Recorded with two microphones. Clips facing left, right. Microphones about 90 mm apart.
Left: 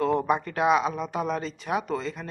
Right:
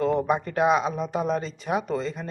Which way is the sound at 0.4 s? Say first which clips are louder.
Right 1 dB; 25° right (ahead or behind).